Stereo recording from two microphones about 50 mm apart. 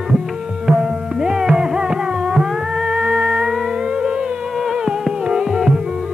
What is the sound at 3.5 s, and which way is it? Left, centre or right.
Music, centre.